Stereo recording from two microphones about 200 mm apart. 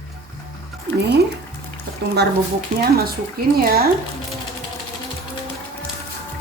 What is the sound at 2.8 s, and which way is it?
A woman's voice, 50° right (ahead or behind).